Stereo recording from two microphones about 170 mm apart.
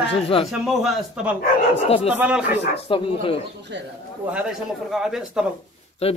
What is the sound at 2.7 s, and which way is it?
Speech, 30° left (ahead or behind).